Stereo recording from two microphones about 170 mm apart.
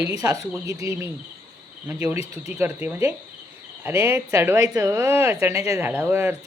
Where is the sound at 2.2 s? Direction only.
40° left (ahead or behind).